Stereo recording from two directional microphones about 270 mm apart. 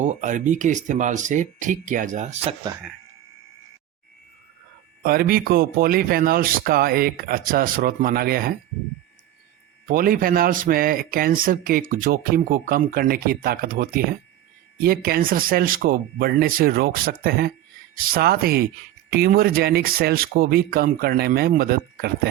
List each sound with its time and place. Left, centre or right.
0.0 s speech: right
5.0 s speech: right
9.8 s speech: right